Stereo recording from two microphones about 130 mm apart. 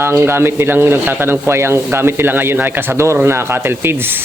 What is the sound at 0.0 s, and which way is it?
Speech, 20° right (ahead or behind).